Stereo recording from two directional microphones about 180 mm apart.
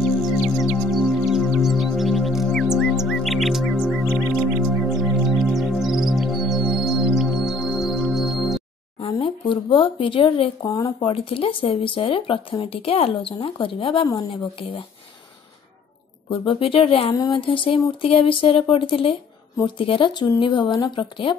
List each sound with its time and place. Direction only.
0.1 s music: centre (ahead or behind)
9.7 s speech: 30° left (ahead or behind)
16.3 s speech: 30° left (ahead or behind)